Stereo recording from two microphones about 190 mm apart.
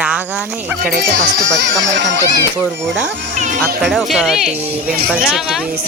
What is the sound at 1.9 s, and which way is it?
Speech, 70° right (ahead or behind).